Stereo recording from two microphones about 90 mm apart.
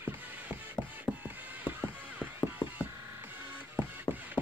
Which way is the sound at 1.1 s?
10° left (ahead or behind).